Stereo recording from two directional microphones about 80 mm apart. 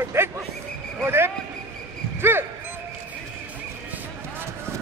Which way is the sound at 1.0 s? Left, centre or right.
Right.